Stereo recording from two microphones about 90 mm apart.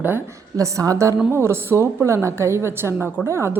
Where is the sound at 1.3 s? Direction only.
30° right (ahead or behind).